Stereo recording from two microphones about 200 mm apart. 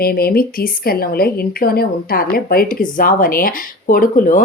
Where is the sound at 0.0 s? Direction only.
50° left (ahead or behind).